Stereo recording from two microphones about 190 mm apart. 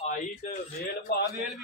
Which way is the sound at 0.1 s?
35° left (ahead or behind).